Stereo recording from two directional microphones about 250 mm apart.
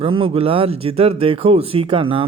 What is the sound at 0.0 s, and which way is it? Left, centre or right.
A man's voice, right.